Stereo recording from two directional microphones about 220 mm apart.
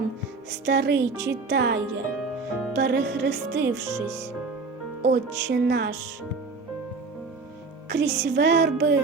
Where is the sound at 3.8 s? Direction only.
15° right (ahead or behind).